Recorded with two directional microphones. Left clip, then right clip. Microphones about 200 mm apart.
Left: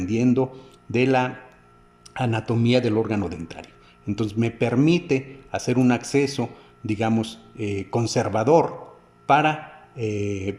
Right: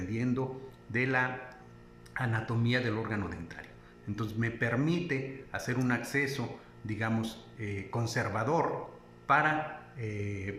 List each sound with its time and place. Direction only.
0.1 s a man's voice: 50° left (ahead or behind)